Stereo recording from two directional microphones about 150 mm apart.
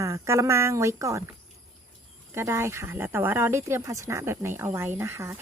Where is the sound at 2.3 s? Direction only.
15° right (ahead or behind).